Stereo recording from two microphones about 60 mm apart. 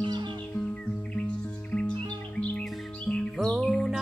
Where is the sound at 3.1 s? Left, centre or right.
Centre.